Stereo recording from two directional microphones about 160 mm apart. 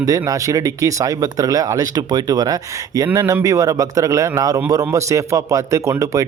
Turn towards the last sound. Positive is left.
turn(degrees=-20)  # may be behind; listen again after turning